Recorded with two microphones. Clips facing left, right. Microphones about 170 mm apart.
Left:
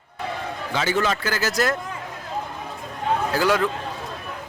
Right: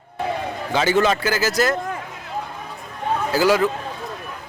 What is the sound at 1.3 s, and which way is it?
Speech, centre (ahead or behind).